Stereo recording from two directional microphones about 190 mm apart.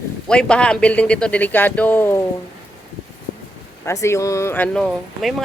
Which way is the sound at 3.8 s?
15° left (ahead or behind).